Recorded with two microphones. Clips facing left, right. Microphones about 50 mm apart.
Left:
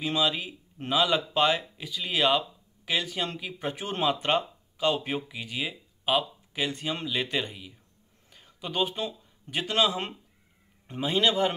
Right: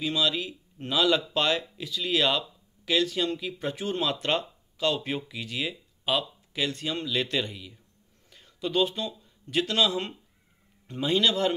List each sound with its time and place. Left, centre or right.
0.0 s speech: left
11.0 s speech: centre